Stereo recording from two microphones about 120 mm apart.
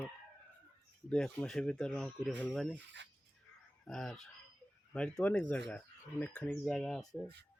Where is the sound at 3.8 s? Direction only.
Centre (ahead or behind).